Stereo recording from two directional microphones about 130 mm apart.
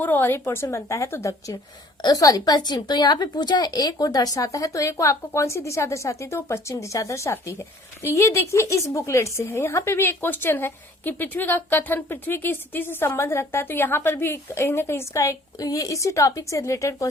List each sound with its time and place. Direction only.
0.0 s a woman's voice: 15° left (ahead or behind)